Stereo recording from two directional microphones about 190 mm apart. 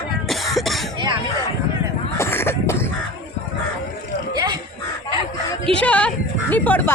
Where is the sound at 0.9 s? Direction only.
25° right (ahead or behind).